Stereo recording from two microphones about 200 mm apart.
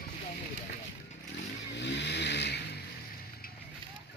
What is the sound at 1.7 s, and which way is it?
Vehicle, 60° left (ahead or behind).